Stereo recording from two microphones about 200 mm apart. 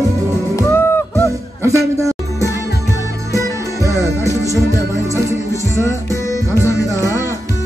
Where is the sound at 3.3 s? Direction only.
15° left (ahead or behind).